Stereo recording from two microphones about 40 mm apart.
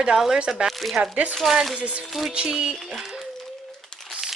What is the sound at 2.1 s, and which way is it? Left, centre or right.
Speech, centre.